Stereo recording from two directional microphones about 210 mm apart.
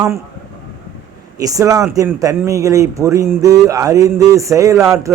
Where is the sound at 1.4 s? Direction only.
15° right (ahead or behind).